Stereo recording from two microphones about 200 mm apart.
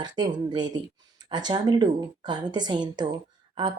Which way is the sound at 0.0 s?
20° right (ahead or behind).